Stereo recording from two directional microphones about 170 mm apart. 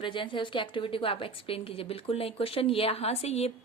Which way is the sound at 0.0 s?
30° left (ahead or behind).